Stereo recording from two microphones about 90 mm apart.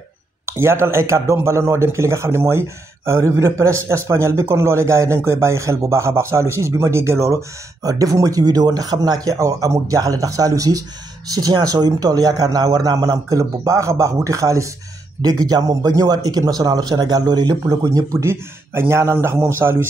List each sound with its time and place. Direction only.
0.5 s a man's voice: 30° right (ahead or behind)
7.8 s a man's voice: 45° right (ahead or behind); by 19.9 s 25° right (ahead or behind)